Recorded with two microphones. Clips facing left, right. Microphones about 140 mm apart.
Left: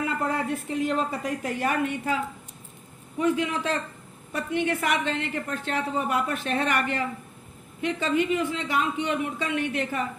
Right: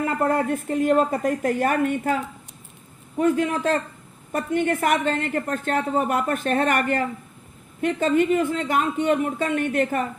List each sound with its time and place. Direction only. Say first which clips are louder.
0.0 s a woman's voice: right 5 dB; 50° right (ahead or behind)